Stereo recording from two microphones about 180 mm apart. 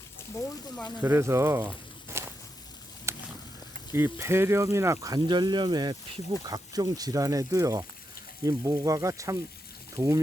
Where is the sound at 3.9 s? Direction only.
15° right (ahead or behind).